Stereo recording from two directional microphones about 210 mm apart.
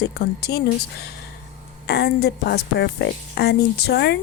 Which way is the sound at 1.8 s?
50° left (ahead or behind).